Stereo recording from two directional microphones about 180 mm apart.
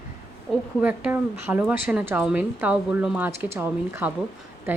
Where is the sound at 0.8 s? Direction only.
10° right (ahead or behind).